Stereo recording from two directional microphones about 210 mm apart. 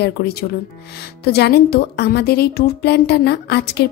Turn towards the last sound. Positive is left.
turn(degrees=50)  # may be behind; listen again after turning